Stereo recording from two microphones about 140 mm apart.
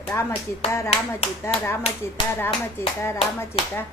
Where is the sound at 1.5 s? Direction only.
10° left (ahead or behind).